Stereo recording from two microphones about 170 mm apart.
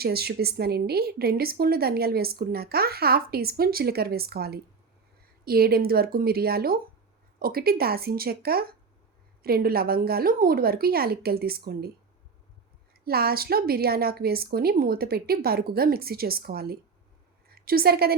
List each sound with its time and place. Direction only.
0.0 s a woman's voice: 65° right (ahead or behind)
12.9 s a woman's voice: 65° right (ahead or behind)